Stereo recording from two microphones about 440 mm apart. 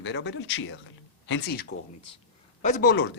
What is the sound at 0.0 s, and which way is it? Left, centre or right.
A man's voice, left.